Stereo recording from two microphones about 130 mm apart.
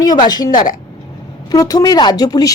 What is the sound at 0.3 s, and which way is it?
Speech, 30° left (ahead or behind).